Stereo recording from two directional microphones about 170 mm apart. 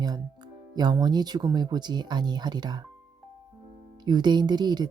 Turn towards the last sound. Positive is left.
turn(degrees=-25)  # may be behind; listen again after turning